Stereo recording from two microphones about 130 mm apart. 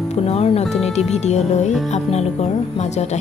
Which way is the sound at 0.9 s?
60° left (ahead or behind).